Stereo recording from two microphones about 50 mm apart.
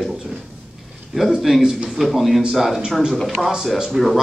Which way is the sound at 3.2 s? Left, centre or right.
Centre.